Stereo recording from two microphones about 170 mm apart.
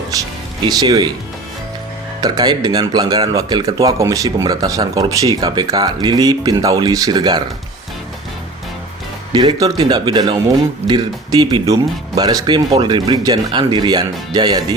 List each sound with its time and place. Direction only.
0.1 s speech: 20° right (ahead or behind)
2.2 s speech: 25° right (ahead or behind)
9.3 s speech: 25° right (ahead or behind)